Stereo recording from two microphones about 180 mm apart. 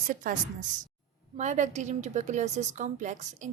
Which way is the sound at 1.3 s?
40° right (ahead or behind).